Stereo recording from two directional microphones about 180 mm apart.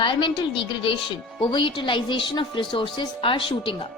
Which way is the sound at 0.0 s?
25° left (ahead or behind).